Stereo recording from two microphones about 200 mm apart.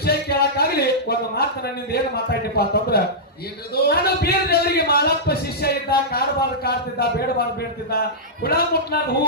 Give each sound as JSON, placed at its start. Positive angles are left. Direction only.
{"t": 0.0, "sound": "a sound", "side_deg": 50}
{"t": 1.9, "sound": "a man's voice", "side_deg": 50}
{"t": 8.4, "sound": "a man's voice", "side_deg": 50}